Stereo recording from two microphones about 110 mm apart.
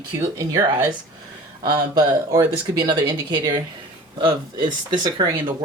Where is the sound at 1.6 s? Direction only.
40° right (ahead or behind).